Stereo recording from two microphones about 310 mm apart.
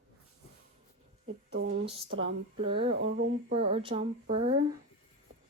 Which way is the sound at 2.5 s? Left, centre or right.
Centre.